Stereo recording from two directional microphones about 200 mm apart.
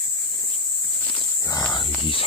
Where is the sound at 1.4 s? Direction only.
15° left (ahead or behind).